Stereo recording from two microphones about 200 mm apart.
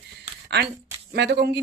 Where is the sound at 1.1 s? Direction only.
55° right (ahead or behind).